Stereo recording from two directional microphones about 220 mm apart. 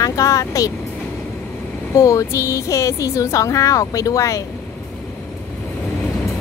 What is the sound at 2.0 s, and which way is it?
Speech, 15° left (ahead or behind).